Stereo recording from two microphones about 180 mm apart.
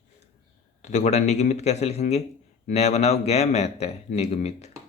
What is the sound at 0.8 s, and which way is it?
Speech, 40° left (ahead or behind).